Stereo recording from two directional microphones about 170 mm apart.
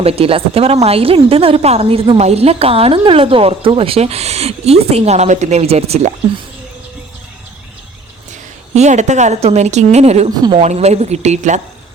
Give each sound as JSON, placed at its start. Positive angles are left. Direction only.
{"t": 0.0, "sound": "a woman's voice", "side_deg": -35}
{"t": 8.7, "sound": "a woman's voice", "side_deg": -40}
{"t": 10.2, "sound": "a woman's voice", "side_deg": -25}
{"t": 10.6, "sound": "a woman's voice", "side_deg": -40}